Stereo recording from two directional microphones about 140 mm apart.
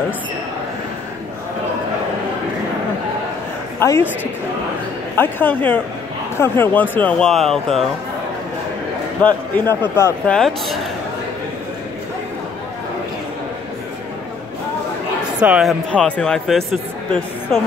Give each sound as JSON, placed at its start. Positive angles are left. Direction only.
{"t": 3.8, "sound": "a woman's voice", "side_deg": 20}
{"t": 5.1, "sound": "speech", "side_deg": 15}
{"t": 9.2, "sound": "speech", "side_deg": 15}
{"t": 10.2, "sound": "a man's voice", "side_deg": 5}
{"t": 15.4, "sound": "speech", "side_deg": -10}
{"t": 15.9, "sound": "a man's voice", "side_deg": 5}